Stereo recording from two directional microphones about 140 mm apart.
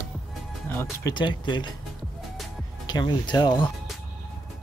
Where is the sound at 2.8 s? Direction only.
30° left (ahead or behind).